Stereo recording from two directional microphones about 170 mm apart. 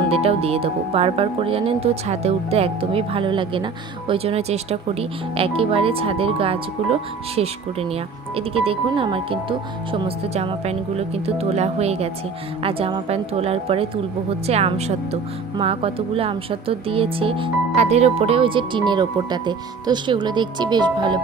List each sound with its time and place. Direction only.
0.1 s speech: 35° right (ahead or behind)